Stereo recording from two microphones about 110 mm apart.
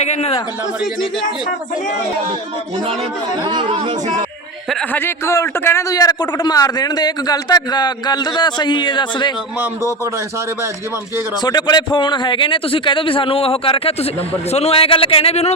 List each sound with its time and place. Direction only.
0.0 s a man's voice: 80° left
3.4 s speech: 40° right (ahead or behind)
4.9 s a man's voice: 20° left (ahead or behind)
6.0 s a man's voice: 35° left (ahead or behind)
11.3 s a man's voice: 40° left (ahead or behind); by 15.5 s 75° left (ahead or behind)